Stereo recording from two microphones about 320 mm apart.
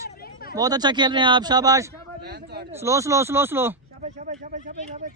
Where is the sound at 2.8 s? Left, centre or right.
Centre.